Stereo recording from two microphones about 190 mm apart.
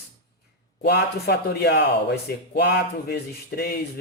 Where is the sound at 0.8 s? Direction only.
60° left (ahead or behind).